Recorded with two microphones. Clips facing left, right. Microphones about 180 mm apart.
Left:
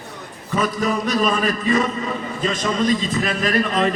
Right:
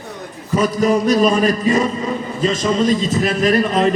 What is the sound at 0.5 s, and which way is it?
A man's voice, 40° right (ahead or behind).